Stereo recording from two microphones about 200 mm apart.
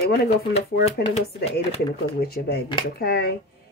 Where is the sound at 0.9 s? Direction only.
30° left (ahead or behind).